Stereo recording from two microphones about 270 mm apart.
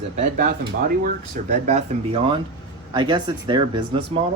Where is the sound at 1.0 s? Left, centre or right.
Right.